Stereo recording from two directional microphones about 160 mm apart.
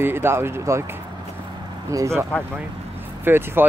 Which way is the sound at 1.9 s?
20° right (ahead or behind).